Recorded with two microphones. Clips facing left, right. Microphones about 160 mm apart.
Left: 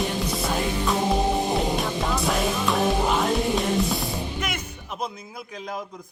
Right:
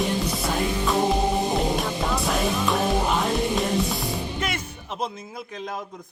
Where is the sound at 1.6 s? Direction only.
Centre (ahead or behind).